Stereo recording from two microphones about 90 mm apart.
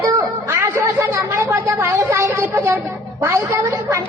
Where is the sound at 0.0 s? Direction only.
40° right (ahead or behind).